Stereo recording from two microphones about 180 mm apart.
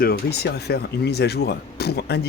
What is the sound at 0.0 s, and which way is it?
Speech, 60° left (ahead or behind).